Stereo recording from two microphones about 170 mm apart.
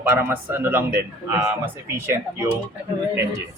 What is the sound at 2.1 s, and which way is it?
Speech, 15° right (ahead or behind).